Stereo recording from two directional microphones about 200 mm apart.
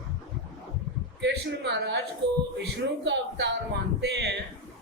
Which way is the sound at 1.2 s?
60° right (ahead or behind).